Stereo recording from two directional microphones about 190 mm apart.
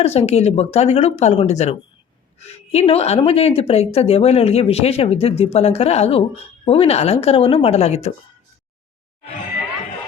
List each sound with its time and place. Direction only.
0.0 s speech: 35° left (ahead or behind)